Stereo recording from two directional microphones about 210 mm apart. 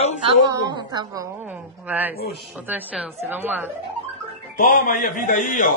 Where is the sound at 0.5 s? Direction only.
20° right (ahead or behind).